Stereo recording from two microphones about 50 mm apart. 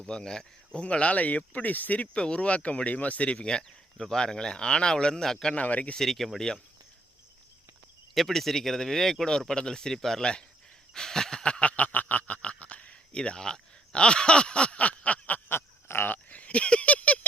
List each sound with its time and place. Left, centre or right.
0.0 s speech: centre
3.3 s speech: centre
5.5 s speech: left
6.0 s speech: centre
8.1 s speech: centre
10.9 s snicker: centre
11.8 s a sound: left
15.4 s a sound: left